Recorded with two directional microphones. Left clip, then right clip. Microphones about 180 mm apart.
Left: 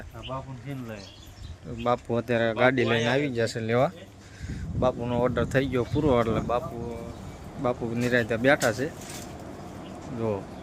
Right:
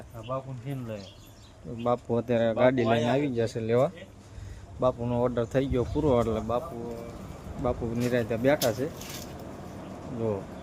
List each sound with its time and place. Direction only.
0.3 s speech: 60° right (ahead or behind)
1.8 s speech: 5° right (ahead or behind)
7.6 s speech: centre (ahead or behind)
10.2 s speech: centre (ahead or behind)